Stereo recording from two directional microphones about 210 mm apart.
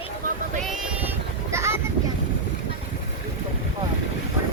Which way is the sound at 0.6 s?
Centre (ahead or behind).